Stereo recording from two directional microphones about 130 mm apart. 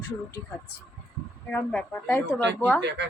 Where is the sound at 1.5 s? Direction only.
15° left (ahead or behind).